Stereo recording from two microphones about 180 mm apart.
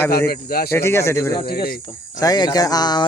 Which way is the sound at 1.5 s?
60° left (ahead or behind).